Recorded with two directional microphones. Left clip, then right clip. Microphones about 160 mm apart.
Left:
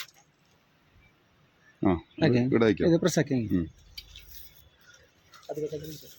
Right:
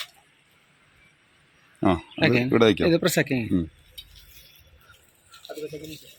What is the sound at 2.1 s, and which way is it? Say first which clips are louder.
Speech: right 3 dB; 30° left (ahead or behind).